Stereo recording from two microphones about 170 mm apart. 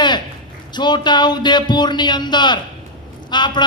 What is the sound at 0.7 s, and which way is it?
A man's voice, 25° left (ahead or behind).